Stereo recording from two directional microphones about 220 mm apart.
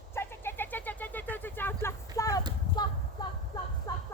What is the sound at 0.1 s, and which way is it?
Vehicle, 10° left (ahead or behind).